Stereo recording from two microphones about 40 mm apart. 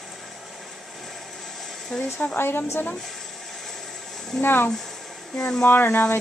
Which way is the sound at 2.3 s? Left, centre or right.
Left.